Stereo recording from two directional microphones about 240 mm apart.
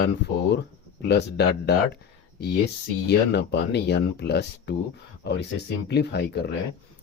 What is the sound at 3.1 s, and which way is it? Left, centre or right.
Speech, left.